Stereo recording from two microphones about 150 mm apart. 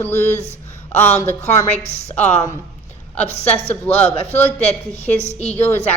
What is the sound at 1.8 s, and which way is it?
Speech, 45° left (ahead or behind).